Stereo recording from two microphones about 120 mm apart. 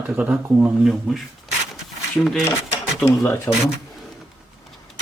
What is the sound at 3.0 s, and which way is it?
Speech, 25° left (ahead or behind).